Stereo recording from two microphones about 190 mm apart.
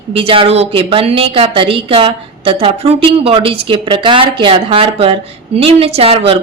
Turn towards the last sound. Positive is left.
turn(degrees=-30)  # may be behind; listen again after turning